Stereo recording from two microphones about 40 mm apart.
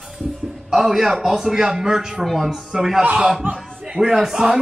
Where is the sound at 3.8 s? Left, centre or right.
Centre.